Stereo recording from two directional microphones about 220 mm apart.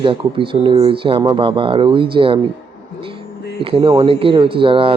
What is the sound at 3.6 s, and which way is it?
Speech, 25° right (ahead or behind).